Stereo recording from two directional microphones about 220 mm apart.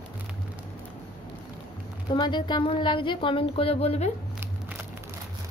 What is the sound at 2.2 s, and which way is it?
Speech, 20° left (ahead or behind).